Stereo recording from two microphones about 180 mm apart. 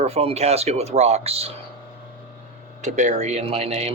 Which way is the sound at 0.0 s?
35° right (ahead or behind).